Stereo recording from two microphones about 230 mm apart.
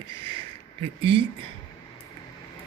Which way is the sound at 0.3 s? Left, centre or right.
Right.